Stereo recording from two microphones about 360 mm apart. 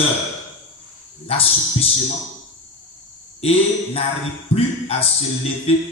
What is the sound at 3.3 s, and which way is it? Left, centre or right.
Speech, centre.